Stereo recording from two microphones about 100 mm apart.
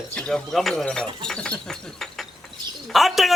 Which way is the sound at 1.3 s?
10° left (ahead or behind).